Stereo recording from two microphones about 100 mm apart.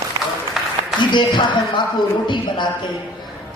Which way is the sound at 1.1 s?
50° left (ahead or behind).